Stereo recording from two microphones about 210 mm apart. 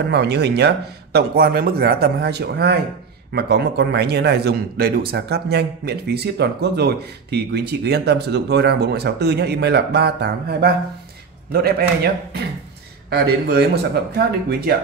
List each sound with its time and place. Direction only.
0.1 s a man's voice: 50° right (ahead or behind)